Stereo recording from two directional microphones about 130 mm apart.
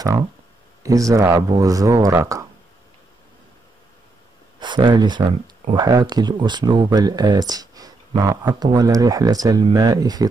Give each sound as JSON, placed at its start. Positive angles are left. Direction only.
{"t": 0.8, "sound": "speech", "side_deg": -25}
{"t": 4.6, "sound": "speech", "side_deg": -35}